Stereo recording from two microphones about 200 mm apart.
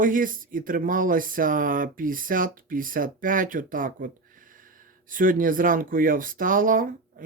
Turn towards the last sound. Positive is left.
turn(degrees=-45)  # may be behind; listen again after turning